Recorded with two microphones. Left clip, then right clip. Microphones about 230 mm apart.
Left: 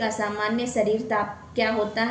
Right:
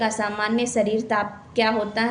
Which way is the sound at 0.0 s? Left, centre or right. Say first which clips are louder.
Right 2 dB; right.